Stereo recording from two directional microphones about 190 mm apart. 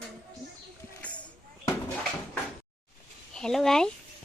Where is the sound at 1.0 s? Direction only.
5° left (ahead or behind).